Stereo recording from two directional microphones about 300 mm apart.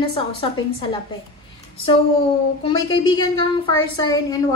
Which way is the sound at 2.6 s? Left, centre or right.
Centre.